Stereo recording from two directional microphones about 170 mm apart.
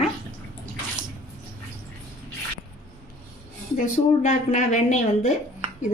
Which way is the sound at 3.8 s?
45° left (ahead or behind).